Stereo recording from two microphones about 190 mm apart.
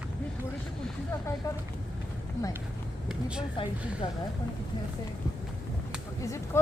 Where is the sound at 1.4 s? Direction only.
15° left (ahead or behind).